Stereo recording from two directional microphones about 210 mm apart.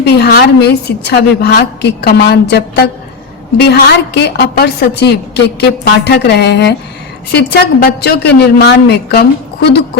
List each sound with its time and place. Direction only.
0.0 s a woman's voice: 50° left (ahead or behind)